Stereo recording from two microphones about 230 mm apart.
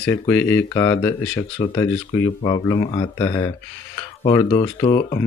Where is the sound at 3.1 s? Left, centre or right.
Centre.